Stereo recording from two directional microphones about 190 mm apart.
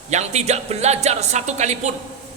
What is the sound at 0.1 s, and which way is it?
Speech, 35° right (ahead or behind).